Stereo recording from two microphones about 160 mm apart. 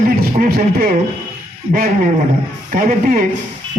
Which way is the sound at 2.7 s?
60° right (ahead or behind).